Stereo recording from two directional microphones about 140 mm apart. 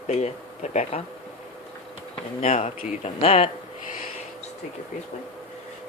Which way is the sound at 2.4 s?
55° left (ahead or behind).